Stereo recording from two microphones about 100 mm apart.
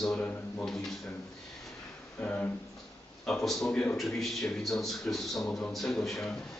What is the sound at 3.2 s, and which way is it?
A man's voice, 5° left (ahead or behind).